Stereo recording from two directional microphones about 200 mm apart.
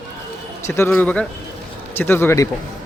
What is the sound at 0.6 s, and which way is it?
A man's voice, 10° left (ahead or behind).